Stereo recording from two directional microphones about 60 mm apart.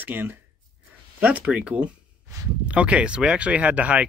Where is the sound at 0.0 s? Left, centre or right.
Right.